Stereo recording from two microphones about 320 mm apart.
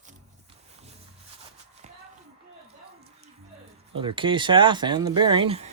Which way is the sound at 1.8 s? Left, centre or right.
Right.